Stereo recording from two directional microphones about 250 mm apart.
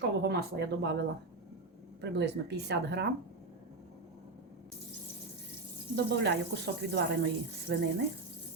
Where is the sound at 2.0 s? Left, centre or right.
Right.